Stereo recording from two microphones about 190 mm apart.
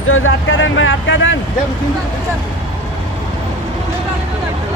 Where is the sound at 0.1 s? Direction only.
90° left.